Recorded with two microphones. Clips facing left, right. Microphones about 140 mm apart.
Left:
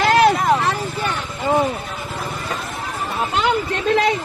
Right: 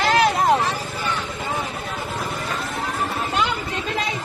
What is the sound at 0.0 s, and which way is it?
Vehicle, 60° left (ahead or behind).